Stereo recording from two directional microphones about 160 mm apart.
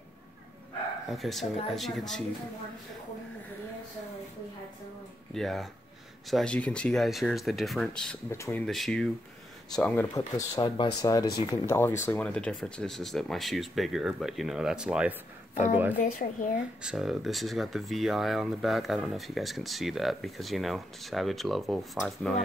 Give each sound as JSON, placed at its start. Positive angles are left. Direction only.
{"t": 1.0, "sound": "speech", "side_deg": 0}
{"t": 5.3, "sound": "speech", "side_deg": 0}
{"t": 8.3, "sound": "speech", "side_deg": 15}
{"t": 8.6, "sound": "speech", "side_deg": 0}
{"t": 10.1, "sound": "speech", "side_deg": 20}
{"t": 16.1, "sound": "speech", "side_deg": 55}
{"t": 16.8, "sound": "speech", "side_deg": -5}